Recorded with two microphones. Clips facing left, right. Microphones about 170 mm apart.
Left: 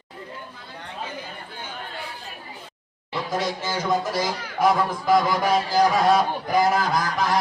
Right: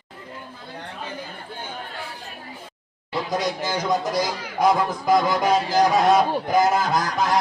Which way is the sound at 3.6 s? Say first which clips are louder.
Right 1 dB; 15° right (ahead or behind).